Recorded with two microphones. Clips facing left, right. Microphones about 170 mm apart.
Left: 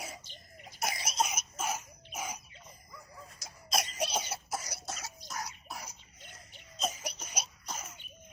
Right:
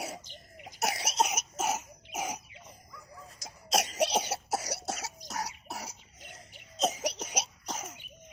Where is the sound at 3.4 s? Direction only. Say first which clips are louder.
Right 5 dB; 80° right.